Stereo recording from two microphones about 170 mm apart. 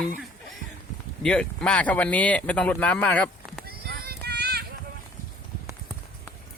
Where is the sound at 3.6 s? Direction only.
65° right (ahead or behind).